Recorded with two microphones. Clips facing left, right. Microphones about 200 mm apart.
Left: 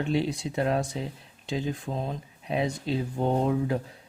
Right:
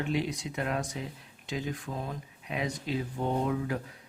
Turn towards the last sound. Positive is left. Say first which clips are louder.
# left 5 dB
turn(degrees=30)  # may be behind; listen again after turning